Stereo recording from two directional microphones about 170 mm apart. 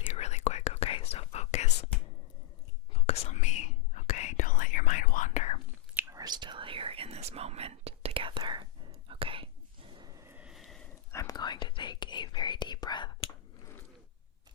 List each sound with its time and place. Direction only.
0.1 s whispering: 40° left (ahead or behind)
3.1 s whispering: 40° left (ahead or behind)
6.0 s whispering: 20° right (ahead or behind); by 10.8 s centre (ahead or behind)
11.1 s whispering: 20° left (ahead or behind)